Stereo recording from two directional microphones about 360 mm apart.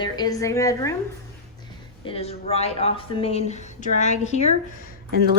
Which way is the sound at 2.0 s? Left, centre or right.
Centre.